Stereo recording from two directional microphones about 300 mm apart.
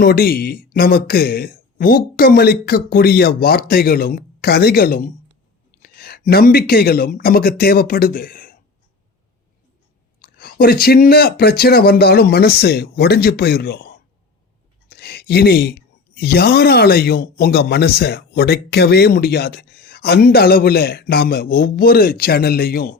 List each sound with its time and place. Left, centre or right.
0.0 s speech: left
10.2 s speech: left